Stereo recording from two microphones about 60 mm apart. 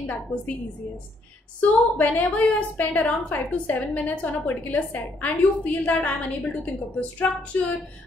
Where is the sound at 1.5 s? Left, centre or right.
Left.